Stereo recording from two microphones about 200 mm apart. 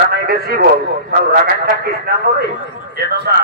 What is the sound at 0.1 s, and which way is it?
A man's voice, 50° right (ahead or behind).